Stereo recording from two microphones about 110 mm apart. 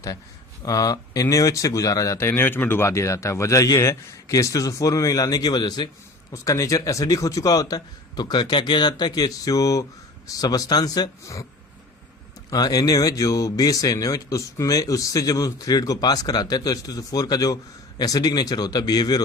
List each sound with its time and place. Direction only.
0.6 s speech: 35° left (ahead or behind)
12.5 s speech: 35° left (ahead or behind)